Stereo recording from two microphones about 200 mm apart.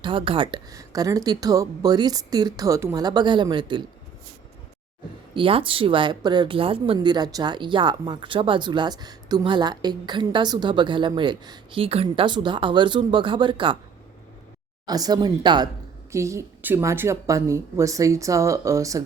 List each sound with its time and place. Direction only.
0.0 s speech: 25° right (ahead or behind)
5.3 s speech: 25° right (ahead or behind)
14.8 s speech: 20° right (ahead or behind)